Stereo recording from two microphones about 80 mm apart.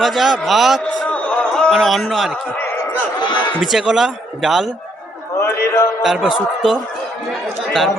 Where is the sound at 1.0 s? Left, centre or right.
Centre.